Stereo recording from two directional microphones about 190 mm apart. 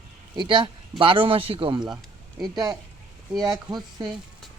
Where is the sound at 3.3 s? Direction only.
20° right (ahead or behind).